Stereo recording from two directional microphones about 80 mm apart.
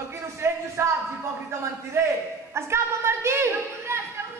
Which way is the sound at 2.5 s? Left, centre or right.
Right.